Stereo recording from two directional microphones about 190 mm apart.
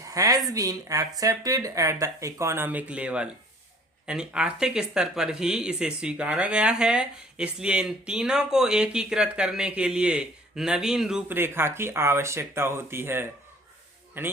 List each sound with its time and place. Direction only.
0.1 s a woman's voice: 20° right (ahead or behind)